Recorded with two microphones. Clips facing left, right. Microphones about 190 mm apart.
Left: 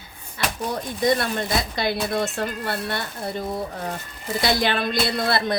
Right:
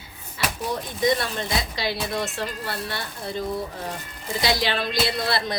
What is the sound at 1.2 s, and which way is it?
Speech, 50° left (ahead or behind).